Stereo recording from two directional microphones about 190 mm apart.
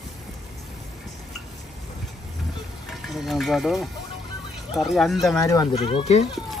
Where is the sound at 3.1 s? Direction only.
Centre (ahead or behind).